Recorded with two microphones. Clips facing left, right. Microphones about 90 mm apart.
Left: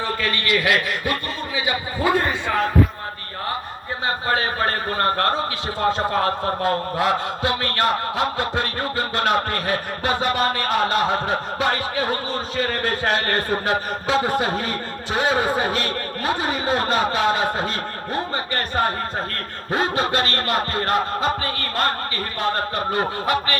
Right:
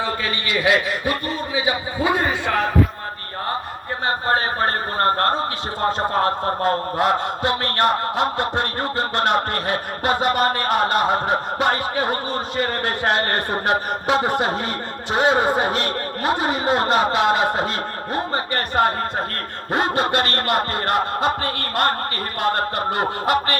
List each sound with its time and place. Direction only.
0.0 s a man's voice: 20° right (ahead or behind)
4.3 s a man's voice: 35° right (ahead or behind); by 21.9 s 50° right (ahead or behind)
22.4 s a sound: 55° right (ahead or behind)